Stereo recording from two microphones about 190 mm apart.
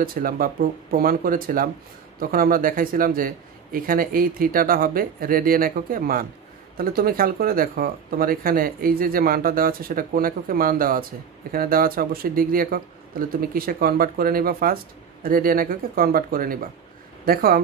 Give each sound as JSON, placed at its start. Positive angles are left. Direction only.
{"t": 0.0, "sound": "speech", "side_deg": -50}